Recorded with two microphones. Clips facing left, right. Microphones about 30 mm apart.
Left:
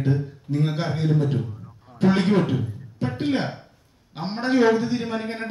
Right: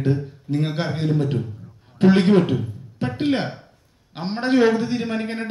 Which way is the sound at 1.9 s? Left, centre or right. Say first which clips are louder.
Right 4 dB; right.